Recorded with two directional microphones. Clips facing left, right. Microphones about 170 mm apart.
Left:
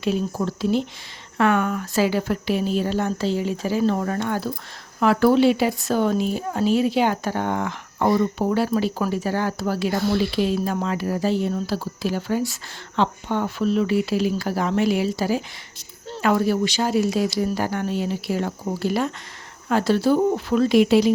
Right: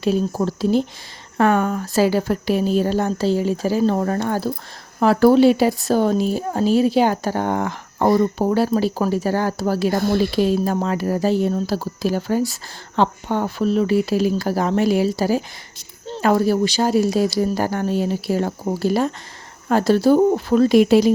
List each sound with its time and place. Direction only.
0.0 s speech: 40° right (ahead or behind)